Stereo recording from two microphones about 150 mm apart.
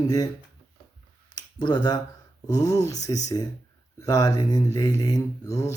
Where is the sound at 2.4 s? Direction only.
25° left (ahead or behind).